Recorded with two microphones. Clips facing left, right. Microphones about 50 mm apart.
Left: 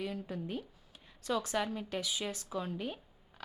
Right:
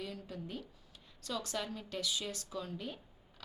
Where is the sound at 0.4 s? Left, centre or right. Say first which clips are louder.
Left 5 dB; left.